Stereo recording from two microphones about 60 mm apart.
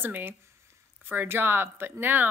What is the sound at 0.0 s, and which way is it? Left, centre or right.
Speech, right.